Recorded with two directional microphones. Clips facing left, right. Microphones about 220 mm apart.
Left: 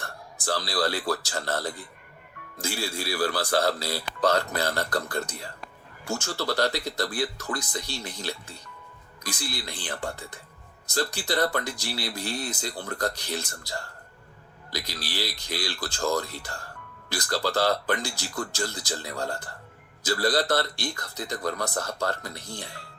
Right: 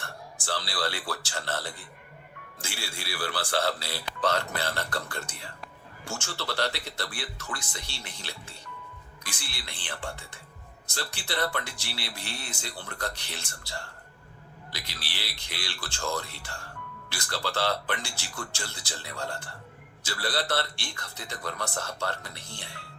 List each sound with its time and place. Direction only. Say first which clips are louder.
0.4 s a man's voice: left 5 dB; 40° left (ahead or behind)